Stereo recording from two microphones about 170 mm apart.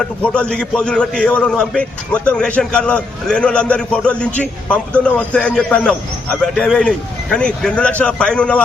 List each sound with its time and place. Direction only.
0.0 s a man's voice: 5° left (ahead or behind)